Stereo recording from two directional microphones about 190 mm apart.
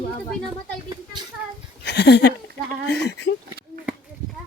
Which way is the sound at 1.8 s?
65° left (ahead or behind).